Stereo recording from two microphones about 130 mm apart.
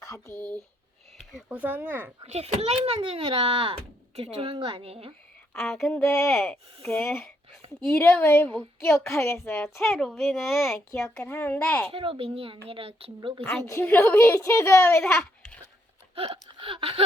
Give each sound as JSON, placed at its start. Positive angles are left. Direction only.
{"t": 0.0, "sound": "speech", "side_deg": 25}
{"t": 0.3, "sound": "speech", "side_deg": 10}
{"t": 1.3, "sound": "speech", "side_deg": -5}
{"t": 2.2, "sound": "a child's voice", "side_deg": -55}
{"t": 5.5, "sound": "a child's voice", "side_deg": 5}
{"t": 6.0, "sound": "a woman's voice", "side_deg": 20}
{"t": 9.8, "sound": "a child's voice", "side_deg": 5}
{"t": 11.9, "sound": "a child's voice", "side_deg": -45}
{"t": 13.1, "sound": "speech", "side_deg": -35}
{"t": 14.0, "sound": "a woman's voice", "side_deg": 20}
{"t": 16.1, "sound": "a child's voice", "side_deg": -45}